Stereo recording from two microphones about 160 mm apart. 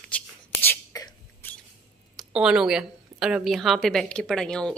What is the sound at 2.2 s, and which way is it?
A woman's voice, 5° right (ahead or behind).